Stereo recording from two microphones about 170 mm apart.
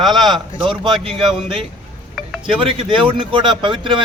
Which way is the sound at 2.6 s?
30° right (ahead or behind).